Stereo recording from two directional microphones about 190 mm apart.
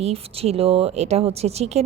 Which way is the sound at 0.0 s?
30° right (ahead or behind).